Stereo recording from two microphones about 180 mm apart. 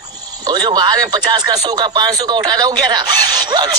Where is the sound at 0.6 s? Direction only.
20° right (ahead or behind).